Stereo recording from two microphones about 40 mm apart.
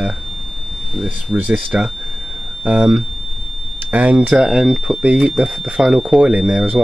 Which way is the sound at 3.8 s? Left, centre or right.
Right.